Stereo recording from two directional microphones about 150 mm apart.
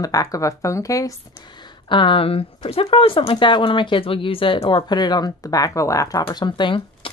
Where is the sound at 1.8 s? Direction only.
35° left (ahead or behind).